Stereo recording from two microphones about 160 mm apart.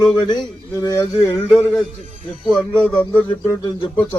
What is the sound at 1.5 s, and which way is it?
Speech, 5° left (ahead or behind).